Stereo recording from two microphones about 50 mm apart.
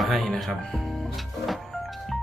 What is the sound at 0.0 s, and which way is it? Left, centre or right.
Speech, centre.